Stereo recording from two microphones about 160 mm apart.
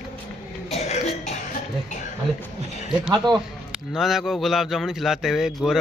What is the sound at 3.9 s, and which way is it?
A man's voice, centre (ahead or behind).